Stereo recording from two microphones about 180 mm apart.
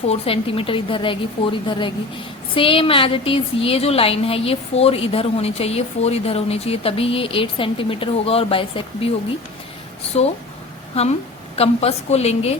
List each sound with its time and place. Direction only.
0.1 s a woman's voice: 30° left (ahead or behind)
10.1 s a woman's voice: 35° left (ahead or behind)